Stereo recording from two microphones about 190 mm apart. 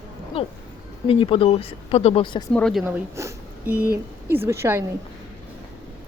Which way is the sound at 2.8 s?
15° right (ahead or behind).